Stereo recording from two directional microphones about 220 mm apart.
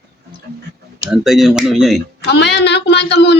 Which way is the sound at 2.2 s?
50° left (ahead or behind).